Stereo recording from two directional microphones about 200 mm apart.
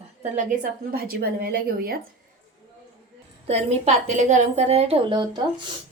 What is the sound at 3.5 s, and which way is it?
A woman's voice, 30° right (ahead or behind).